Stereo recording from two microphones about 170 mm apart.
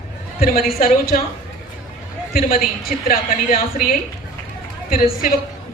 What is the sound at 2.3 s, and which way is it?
A man's voice, 60° left (ahead or behind).